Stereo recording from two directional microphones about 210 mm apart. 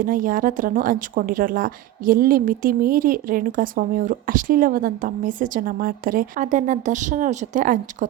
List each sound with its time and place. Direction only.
0.0 s speech: 40° right (ahead or behind)